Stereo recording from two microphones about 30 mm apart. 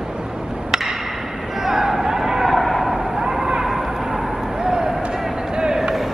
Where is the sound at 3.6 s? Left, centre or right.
Centre.